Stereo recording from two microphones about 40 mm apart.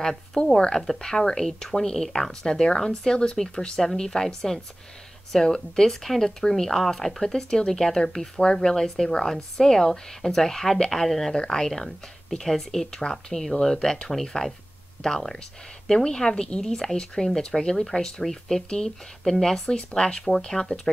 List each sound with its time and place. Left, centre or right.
0.0 s speech: centre